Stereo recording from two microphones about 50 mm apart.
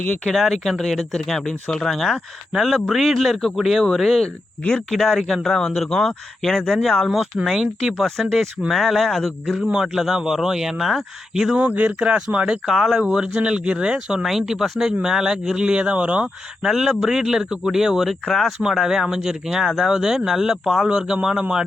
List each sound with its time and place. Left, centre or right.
0.3 s a man's voice: centre
8.0 s speech: centre
9.6 s speech: centre
11.5 s speech: right
12.6 s speech: centre
16.6 s speech: centre
19.6 s speech: centre
19.9 s speech: centre